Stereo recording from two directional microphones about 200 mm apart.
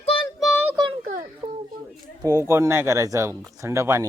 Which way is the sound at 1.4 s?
25° right (ahead or behind).